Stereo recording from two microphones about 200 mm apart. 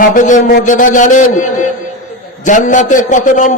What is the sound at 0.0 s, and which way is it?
A man's voice, 40° left (ahead or behind).